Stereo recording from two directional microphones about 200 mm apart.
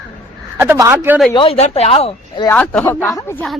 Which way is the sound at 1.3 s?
25° left (ahead or behind).